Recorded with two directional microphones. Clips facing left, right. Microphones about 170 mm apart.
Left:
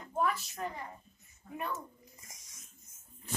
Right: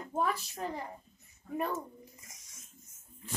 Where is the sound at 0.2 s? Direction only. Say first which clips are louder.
Even; 35° right (ahead or behind).